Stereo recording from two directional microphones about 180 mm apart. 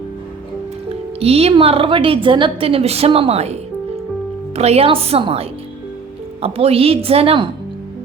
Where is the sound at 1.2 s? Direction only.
35° right (ahead or behind).